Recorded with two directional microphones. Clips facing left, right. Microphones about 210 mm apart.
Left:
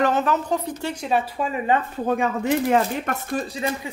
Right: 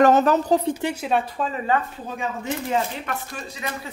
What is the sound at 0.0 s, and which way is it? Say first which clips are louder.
Speech: right 5 dB; 40° right (ahead or behind).